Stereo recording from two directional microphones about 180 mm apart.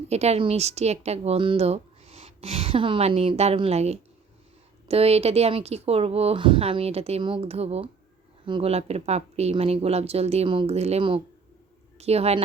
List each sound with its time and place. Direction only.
0.1 s speech: 35° right (ahead or behind)